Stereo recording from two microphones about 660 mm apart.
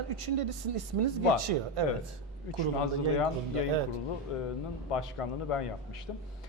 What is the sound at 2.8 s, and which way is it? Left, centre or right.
Speech, left.